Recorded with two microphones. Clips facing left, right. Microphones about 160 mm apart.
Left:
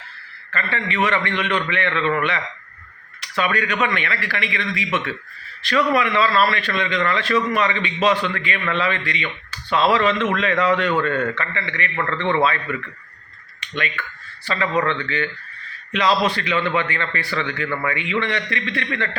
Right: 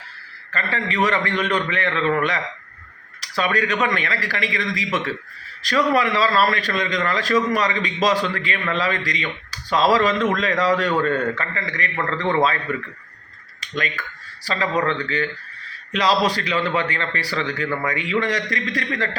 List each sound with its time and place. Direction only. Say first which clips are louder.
0.5 s a man's voice: even; 35° right (ahead or behind)
2.0 s a man's voice: right 1 dB; centre (ahead or behind)
3.2 s a man's voice: even; 35° right (ahead or behind)
13.6 s a man's voice: even; 40° right (ahead or behind)